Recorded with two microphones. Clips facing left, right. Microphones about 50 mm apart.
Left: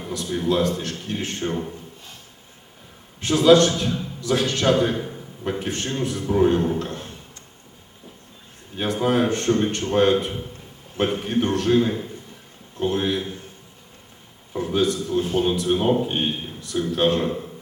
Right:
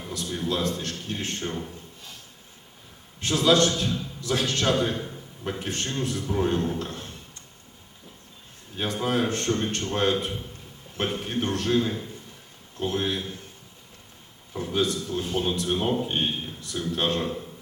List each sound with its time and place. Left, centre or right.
0.0 s a man's voice: centre
3.2 s a man's voice: centre
8.7 s a man's voice: centre
14.5 s a man's voice: centre